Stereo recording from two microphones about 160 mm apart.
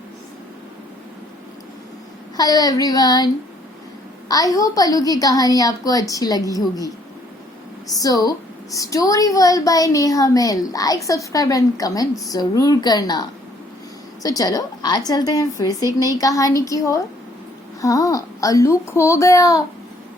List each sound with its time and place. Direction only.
2.3 s a woman's voice: 25° left (ahead or behind)
4.3 s a woman's voice: 20° left (ahead or behind)